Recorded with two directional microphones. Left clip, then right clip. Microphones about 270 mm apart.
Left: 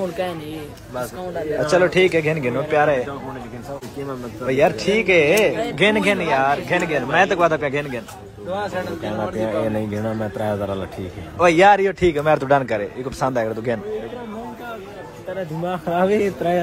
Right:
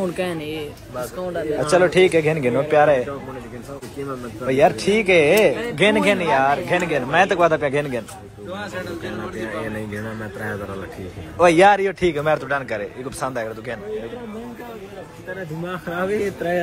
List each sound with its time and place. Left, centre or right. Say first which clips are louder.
0.2 s speech: left 1 dB; right
1.7 s speech: right 1 dB; centre
4.5 s a man's voice: right 1 dB; centre
8.5 s speech: left 4 dB; left
11.3 s a man's voice: even; centre
15.6 s speech: left 6 dB; left